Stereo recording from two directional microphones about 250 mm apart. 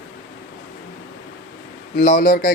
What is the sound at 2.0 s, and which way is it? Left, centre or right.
Speech, left.